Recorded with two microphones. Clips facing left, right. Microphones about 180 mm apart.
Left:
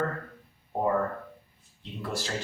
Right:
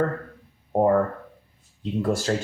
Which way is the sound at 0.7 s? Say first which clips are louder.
Right 8 dB; 50° right (ahead or behind).